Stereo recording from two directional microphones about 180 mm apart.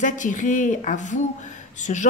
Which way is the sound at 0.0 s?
45° left (ahead or behind).